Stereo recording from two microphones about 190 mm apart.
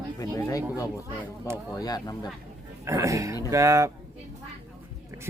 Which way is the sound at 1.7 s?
20° left (ahead or behind).